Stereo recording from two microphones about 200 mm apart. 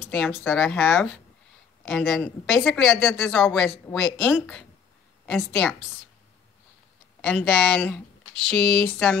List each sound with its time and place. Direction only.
0.0 s speech: 5° left (ahead or behind)
7.2 s speech: 5° left (ahead or behind)
8.5 s a sound: 25° right (ahead or behind)
8.8 s speech: 10° left (ahead or behind)